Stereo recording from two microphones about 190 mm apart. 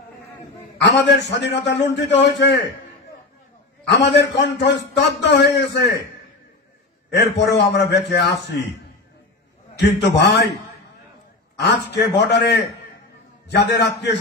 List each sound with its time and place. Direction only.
0.8 s a man's voice: 70° left (ahead or behind)
3.8 s a man's voice: 65° left (ahead or behind)
7.3 s a man's voice: 65° left (ahead or behind)
9.8 s a man's voice: 65° left (ahead or behind)
11.5 s a man's voice: 65° left (ahead or behind)